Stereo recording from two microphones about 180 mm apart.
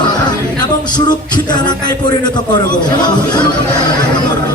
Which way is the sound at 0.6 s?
25° left (ahead or behind).